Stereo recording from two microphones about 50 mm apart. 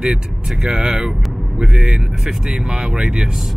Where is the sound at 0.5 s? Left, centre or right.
Centre.